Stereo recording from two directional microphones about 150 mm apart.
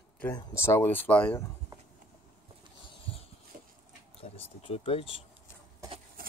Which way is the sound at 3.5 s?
65° right (ahead or behind).